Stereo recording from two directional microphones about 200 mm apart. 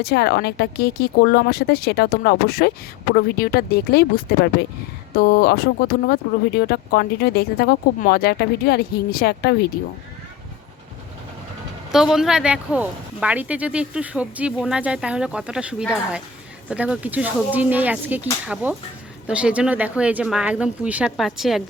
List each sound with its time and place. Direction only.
0.0 s speech: 55° left (ahead or behind)
11.9 s speech: centre (ahead or behind)